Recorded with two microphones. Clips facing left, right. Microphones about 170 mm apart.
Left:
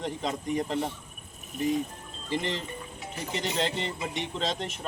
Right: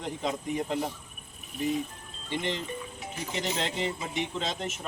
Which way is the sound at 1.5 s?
45° left (ahead or behind).